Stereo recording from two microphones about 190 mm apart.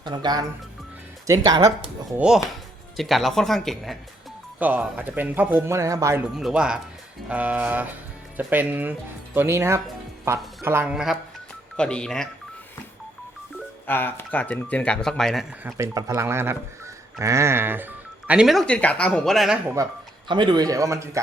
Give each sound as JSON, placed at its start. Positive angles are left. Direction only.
{"t": 0.0, "sound": "speech", "side_deg": -25}
{"t": 2.1, "sound": "speech", "side_deg": -5}
{"t": 6.3, "sound": "speech", "side_deg": -5}
{"t": 13.8, "sound": "speech", "side_deg": 10}
{"t": 15.6, "sound": "speech", "side_deg": -15}
{"t": 19.7, "sound": "speech", "side_deg": -20}